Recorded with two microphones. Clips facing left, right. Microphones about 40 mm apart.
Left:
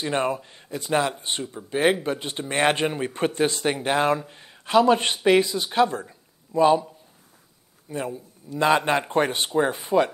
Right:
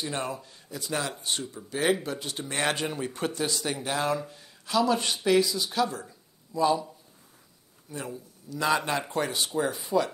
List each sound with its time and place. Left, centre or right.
0.0 s speech: left
7.9 s speech: left